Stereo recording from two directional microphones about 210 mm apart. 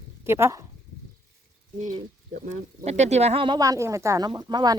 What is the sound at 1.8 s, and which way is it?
Speech, 35° right (ahead or behind).